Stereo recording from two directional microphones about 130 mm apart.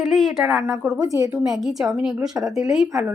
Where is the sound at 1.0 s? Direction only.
25° right (ahead or behind).